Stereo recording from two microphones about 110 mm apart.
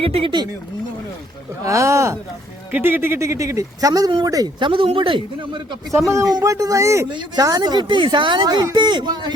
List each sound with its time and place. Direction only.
0.0 s speech: 55° right (ahead or behind)
1.6 s speech: 30° right (ahead or behind)
4.6 s speech: 55° right (ahead or behind)
5.9 s speech: 25° right (ahead or behind); by 9.3 s 40° right (ahead or behind)